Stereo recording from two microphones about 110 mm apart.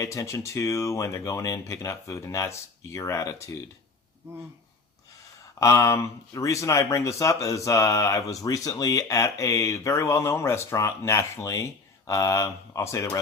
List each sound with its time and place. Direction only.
0.0 s speech: 30° left (ahead or behind)
5.5 s speech: 30° left (ahead or behind)